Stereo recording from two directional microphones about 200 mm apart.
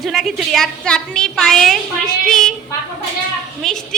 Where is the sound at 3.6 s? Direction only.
5° left (ahead or behind).